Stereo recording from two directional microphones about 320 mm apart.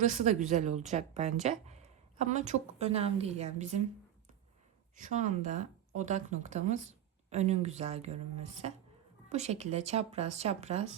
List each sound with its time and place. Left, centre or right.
0.0 s speech: right
4.9 s speech: right